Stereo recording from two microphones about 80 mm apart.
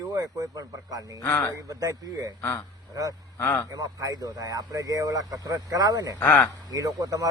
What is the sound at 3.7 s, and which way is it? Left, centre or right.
Speech, right.